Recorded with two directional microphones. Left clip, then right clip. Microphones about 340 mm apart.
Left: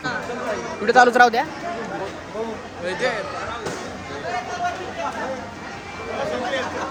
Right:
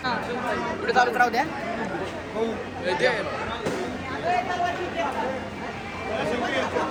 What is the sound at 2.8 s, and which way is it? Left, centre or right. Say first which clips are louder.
Speech: even; centre.